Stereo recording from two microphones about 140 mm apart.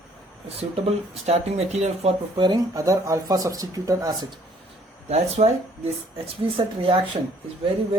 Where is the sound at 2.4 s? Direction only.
25° right (ahead or behind).